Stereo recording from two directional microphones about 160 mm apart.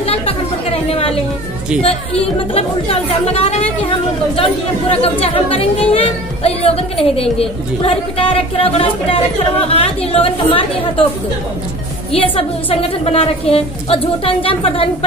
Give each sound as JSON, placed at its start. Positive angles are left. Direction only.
{"t": 0.0, "sound": "chatter", "side_deg": 35}
{"t": 1.8, "sound": "a woman's voice", "side_deg": 35}
{"t": 5.2, "sound": "a woman's voice", "side_deg": 35}
{"t": 12.1, "sound": "a woman's voice", "side_deg": 35}